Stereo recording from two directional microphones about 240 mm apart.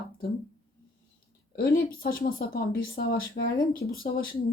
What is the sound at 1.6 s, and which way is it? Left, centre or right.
Speech, left.